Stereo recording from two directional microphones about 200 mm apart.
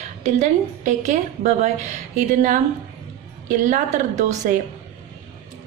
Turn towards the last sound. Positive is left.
turn(degrees=-35)  # may be behind; listen again after turning